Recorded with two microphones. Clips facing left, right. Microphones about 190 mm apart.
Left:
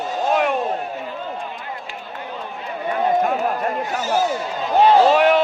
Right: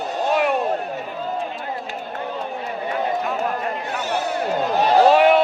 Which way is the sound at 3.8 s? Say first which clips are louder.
Left 5 dB; 60° right (ahead or behind).